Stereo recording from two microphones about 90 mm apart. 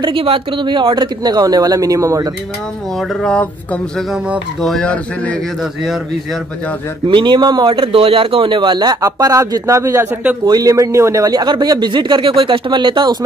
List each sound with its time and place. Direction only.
0.0 s speech: 80° right; by 2.3 s 35° right (ahead or behind)
3.0 s speech: centre (ahead or behind)
4.8 s speech: 15° left (ahead or behind)
7.1 s speech: 60° right (ahead or behind)
7.7 s speech: 90° right; by 8.9 s 60° right (ahead or behind)
9.0 s speech: 40° right (ahead or behind)
11.2 s speech: 50° right (ahead or behind)